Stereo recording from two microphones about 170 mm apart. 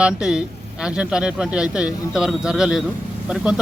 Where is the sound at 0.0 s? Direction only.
5° right (ahead or behind).